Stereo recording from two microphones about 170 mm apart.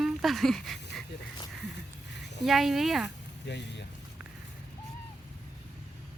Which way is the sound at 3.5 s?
90° left.